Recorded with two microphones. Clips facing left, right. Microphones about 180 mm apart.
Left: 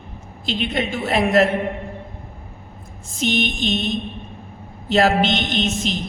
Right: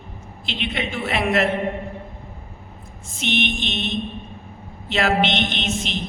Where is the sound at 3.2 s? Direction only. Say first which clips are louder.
Left 3 dB; 40° left (ahead or behind).